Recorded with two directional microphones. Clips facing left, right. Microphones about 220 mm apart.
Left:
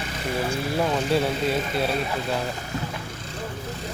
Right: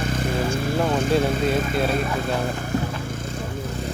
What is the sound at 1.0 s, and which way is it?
Speech, 50° right (ahead or behind).